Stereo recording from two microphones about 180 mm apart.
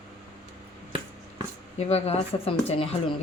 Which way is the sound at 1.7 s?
35° left (ahead or behind).